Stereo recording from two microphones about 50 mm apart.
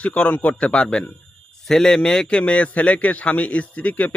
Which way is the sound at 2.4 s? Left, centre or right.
Left.